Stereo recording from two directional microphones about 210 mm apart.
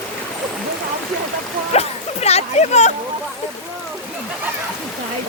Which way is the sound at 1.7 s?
30° left (ahead or behind).